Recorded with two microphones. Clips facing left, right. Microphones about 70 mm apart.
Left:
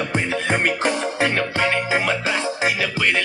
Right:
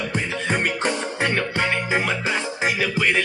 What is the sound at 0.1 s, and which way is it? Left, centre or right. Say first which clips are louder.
Music: left 2 dB; left.